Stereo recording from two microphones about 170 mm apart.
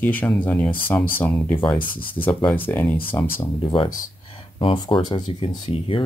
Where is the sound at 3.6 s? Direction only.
30° left (ahead or behind).